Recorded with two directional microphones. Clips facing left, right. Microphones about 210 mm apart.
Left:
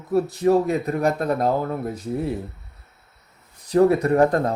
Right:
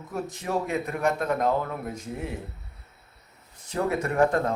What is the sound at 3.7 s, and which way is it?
Speech, 35° left (ahead or behind).